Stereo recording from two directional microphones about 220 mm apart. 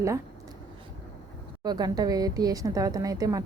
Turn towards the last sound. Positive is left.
turn(degrees=-15)  # may be behind; listen again after turning